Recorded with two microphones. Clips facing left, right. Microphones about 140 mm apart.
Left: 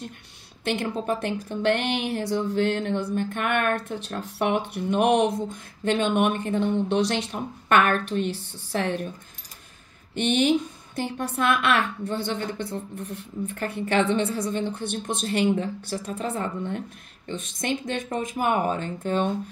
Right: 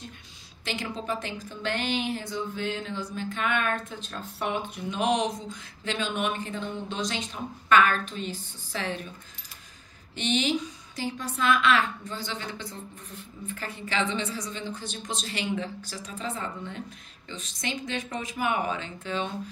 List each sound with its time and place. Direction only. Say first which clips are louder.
0.7 s speech: left 6 dB; 55° left (ahead or behind)
10.1 s speech: left 6 dB; 55° left (ahead or behind)